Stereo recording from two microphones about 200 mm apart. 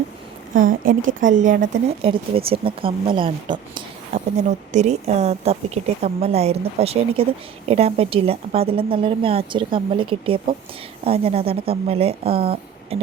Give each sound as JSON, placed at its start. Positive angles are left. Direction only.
{"t": 0.5, "sound": "a woman's voice", "side_deg": -45}
{"t": 1.9, "sound": "speech", "side_deg": -25}
{"t": 4.1, "sound": "a woman's voice", "side_deg": -35}